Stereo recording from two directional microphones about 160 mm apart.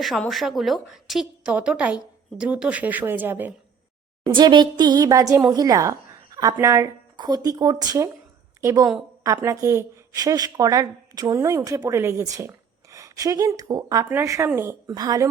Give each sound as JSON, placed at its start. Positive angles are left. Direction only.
{"t": 0.0, "sound": "a woman's voice", "side_deg": 0}
{"t": 4.3, "sound": "a woman's voice", "side_deg": -30}